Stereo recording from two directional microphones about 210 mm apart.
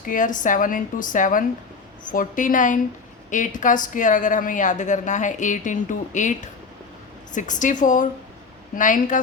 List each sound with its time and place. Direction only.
0.1 s speech: 40° left (ahead or behind)